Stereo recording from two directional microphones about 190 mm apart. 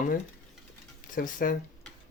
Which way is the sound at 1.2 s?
45° left (ahead or behind).